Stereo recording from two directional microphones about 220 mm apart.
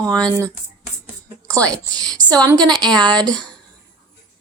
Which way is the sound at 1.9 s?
15° right (ahead or behind).